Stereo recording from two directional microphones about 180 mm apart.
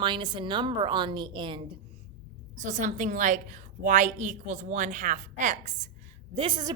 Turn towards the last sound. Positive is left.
turn(degrees=-25)  # may be behind; listen again after turning